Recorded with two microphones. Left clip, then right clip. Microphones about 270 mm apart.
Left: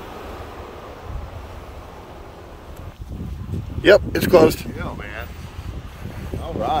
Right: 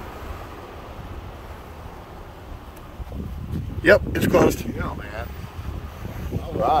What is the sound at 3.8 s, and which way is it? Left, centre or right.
Speech, left.